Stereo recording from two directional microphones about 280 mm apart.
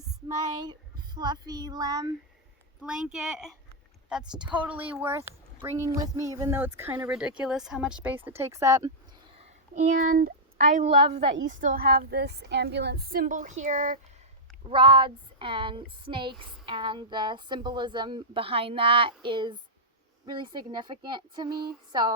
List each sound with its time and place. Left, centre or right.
0.6 s speech: centre
2.8 s a woman's voice: centre
9.3 s a woman's voice: right
14.7 s a woman's voice: centre